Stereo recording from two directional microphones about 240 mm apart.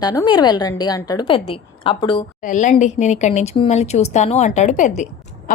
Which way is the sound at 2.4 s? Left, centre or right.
Left.